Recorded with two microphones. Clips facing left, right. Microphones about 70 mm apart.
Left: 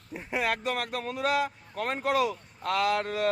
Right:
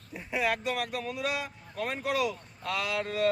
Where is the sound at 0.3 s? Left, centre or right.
Left.